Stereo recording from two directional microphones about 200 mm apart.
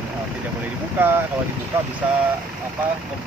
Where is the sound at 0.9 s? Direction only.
10° right (ahead or behind).